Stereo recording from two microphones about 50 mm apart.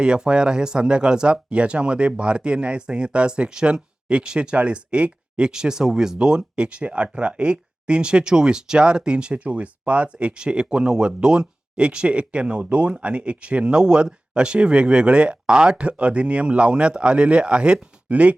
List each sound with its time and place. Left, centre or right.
0.0 s speech: centre